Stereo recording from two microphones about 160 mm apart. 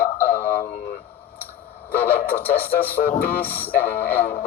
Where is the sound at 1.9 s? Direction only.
10° left (ahead or behind).